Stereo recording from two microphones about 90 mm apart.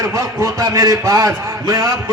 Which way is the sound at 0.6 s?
40° right (ahead or behind).